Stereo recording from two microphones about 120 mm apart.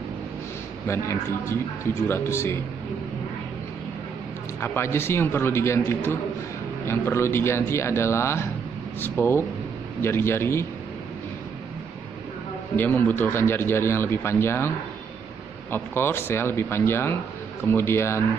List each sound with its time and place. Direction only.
0.8 s speech: 20° left (ahead or behind)
4.6 s speech: 20° left (ahead or behind)
12.7 s speech: 15° left (ahead or behind)
15.7 s speech: 20° left (ahead or behind)